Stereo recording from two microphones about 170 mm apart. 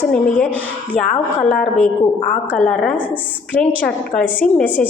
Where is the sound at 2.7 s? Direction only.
5° left (ahead or behind).